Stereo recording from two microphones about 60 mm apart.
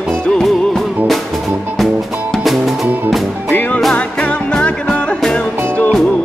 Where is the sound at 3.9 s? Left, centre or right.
Centre.